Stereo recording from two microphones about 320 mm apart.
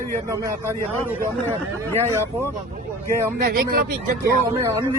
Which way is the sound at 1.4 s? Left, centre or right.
Centre.